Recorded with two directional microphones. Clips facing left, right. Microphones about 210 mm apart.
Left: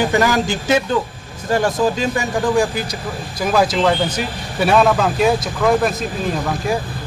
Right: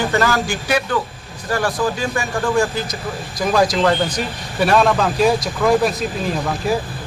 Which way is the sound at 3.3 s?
5° left (ahead or behind).